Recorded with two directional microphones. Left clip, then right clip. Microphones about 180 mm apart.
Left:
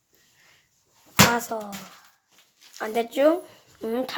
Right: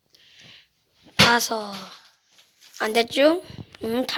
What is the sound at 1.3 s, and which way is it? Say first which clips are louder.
Speech: right 5 dB; 5° right (ahead or behind).